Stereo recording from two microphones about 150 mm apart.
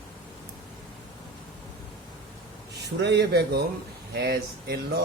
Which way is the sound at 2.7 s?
90° right.